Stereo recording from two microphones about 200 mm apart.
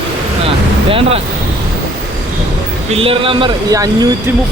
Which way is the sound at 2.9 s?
30° right (ahead or behind).